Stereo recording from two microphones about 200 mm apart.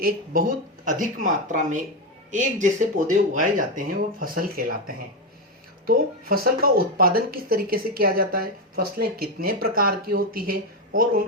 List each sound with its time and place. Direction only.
0.0 s speech: 45° right (ahead or behind)